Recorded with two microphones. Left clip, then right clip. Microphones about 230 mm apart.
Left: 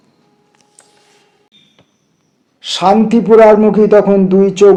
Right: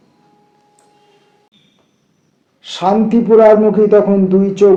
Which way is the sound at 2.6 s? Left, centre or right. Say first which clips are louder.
Left 4 dB; left.